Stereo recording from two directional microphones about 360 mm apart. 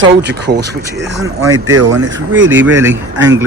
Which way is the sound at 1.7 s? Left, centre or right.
Right.